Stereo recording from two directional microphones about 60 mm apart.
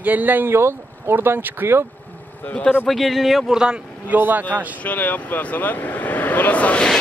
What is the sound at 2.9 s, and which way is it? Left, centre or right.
Speech, centre.